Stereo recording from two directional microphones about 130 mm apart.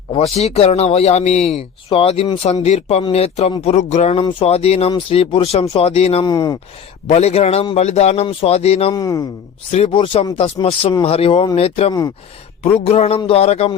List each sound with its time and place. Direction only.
0.2 s speech: 55° left (ahead or behind)
6.2 s speech: 30° left (ahead or behind)
7.1 s speech: 55° left (ahead or behind)
8.9 s speech: 30° left (ahead or behind)
9.7 s speech: 50° left (ahead or behind)